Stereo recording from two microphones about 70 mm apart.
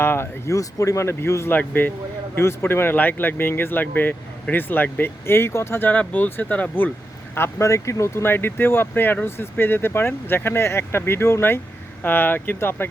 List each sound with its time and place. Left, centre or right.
0.0 s speech: left
1.5 s speech: left
7.3 s speech: left